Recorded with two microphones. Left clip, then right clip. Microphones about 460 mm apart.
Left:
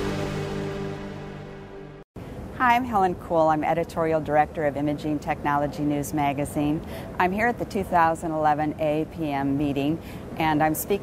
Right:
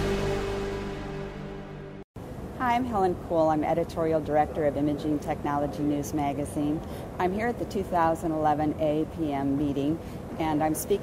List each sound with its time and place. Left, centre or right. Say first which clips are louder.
2.6 s speech: left 5 dB; centre